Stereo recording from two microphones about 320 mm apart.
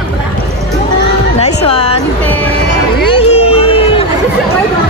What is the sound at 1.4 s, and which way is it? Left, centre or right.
Music, centre.